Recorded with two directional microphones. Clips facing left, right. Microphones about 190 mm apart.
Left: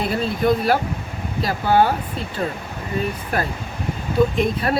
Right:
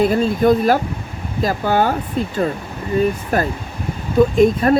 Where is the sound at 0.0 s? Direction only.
45° right (ahead or behind).